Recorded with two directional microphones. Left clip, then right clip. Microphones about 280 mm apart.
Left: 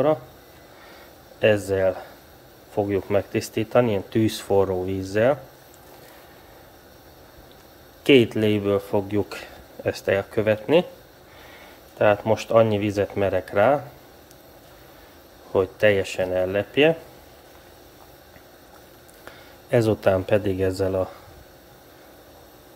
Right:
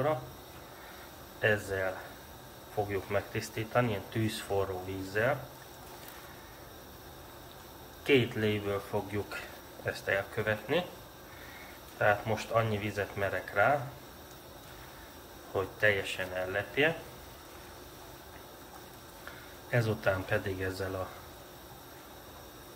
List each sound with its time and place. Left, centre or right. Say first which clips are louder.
1.4 s speech: left 10 dB; left
2.9 s speech: left 11 dB; left
8.0 s speech: left 11 dB; left
12.0 s speech: left 9 dB; left
15.5 s speech: left 10 dB; left
19.7 s speech: left 11 dB; left